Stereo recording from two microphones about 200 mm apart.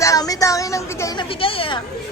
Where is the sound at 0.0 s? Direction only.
15° left (ahead or behind).